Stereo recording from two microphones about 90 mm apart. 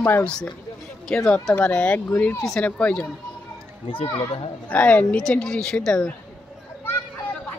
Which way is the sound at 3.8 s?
90° left.